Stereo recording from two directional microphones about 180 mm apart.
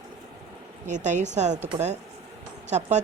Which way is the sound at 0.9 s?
40° right (ahead or behind).